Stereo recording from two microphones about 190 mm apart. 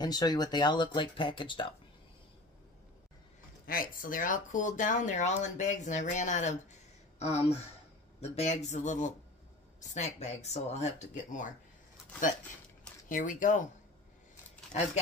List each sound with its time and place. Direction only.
0.0 s speech: 20° left (ahead or behind)
3.6 s speech: 50° left (ahead or behind)
13.1 s speech: 45° left (ahead or behind)